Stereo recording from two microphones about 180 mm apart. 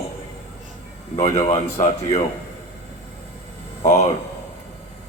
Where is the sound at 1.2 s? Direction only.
40° left (ahead or behind).